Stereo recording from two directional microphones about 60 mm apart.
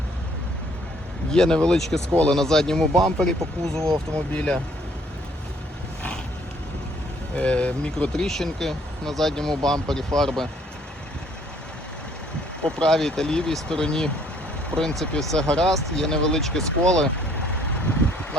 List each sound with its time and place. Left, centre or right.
1.3 s speech: centre
7.3 s speech: left; by 10.5 s centre
12.6 s speech: centre